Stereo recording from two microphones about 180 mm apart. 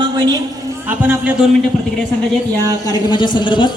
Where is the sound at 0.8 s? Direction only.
10° right (ahead or behind).